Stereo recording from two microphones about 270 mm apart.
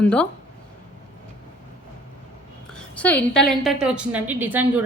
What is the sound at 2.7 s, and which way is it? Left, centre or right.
A woman's voice, centre.